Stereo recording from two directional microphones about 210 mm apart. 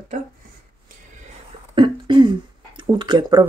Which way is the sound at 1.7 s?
25° right (ahead or behind).